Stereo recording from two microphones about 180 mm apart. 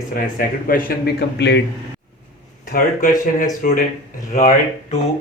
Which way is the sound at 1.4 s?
70° left (ahead or behind).